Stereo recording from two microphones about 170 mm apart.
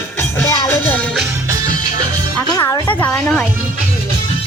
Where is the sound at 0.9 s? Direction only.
5° left (ahead or behind).